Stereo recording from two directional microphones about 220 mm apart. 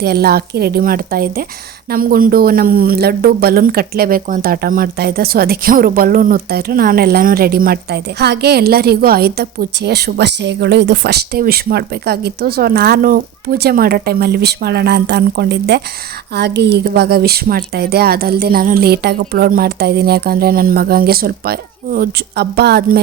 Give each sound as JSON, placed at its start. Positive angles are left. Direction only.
{"t": 0.0, "sound": "speech", "side_deg": -45}